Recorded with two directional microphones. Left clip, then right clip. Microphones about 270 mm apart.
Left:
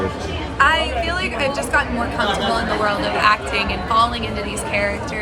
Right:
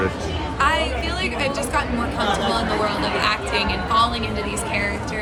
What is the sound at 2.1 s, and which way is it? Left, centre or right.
A woman's voice, centre.